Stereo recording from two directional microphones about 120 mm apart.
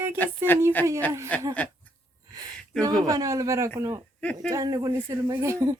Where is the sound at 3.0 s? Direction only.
30° right (ahead or behind).